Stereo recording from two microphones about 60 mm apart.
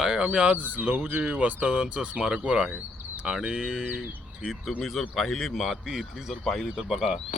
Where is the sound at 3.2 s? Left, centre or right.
Centre.